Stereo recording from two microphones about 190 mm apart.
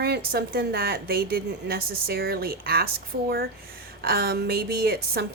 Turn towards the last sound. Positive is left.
turn(degrees=-55)  # may be behind; listen again after turning